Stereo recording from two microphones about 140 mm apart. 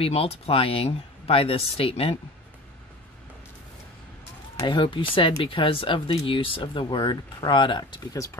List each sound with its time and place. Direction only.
0.0 s speech: 45° left (ahead or behind)
4.6 s speech: 35° left (ahead or behind)